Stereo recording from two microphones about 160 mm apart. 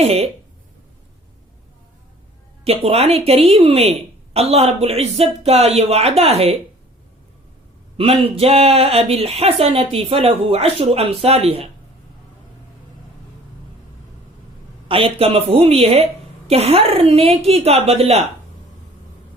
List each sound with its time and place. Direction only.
0.0 s a sound: 40° right (ahead or behind)
2.6 s speech: 40° right (ahead or behind)
7.9 s speech: 35° right (ahead or behind)
14.8 s speech: 35° right (ahead or behind)